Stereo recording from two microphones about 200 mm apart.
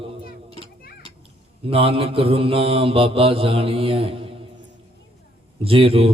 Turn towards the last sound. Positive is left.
turn(degrees=-30)  # may be behind; listen again after turning